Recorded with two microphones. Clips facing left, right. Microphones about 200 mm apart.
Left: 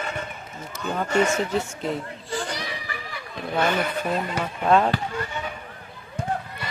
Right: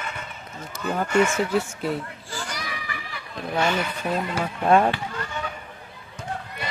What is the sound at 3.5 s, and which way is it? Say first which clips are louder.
Speech: left 1 dB; 55° left (ahead or behind).